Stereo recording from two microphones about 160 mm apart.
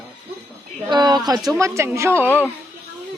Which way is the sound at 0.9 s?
25° right (ahead or behind).